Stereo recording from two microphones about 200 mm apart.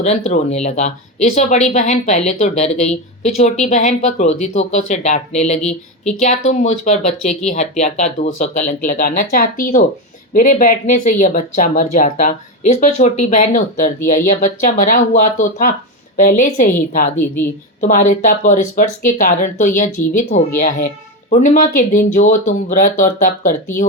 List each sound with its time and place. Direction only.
0.0 s speech: 35° left (ahead or behind)